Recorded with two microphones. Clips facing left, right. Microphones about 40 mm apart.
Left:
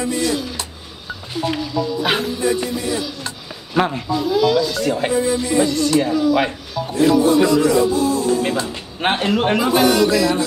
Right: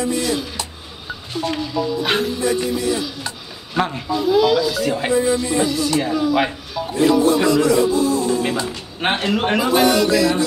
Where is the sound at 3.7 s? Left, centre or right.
Centre.